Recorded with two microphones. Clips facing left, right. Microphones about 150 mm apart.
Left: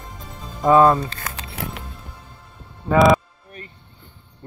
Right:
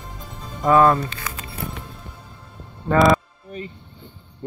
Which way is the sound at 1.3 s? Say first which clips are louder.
Left 1 dB; 90° left.